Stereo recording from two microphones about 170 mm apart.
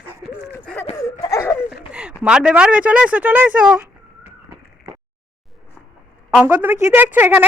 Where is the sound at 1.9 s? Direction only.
5° right (ahead or behind).